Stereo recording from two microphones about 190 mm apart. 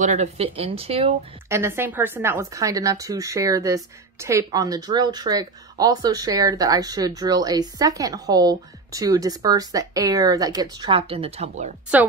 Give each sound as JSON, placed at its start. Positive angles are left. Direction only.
{"t": 0.0, "sound": "speech", "side_deg": -40}
{"t": 1.5, "sound": "speech", "side_deg": -15}
{"t": 11.9, "sound": "a woman's voice", "side_deg": -5}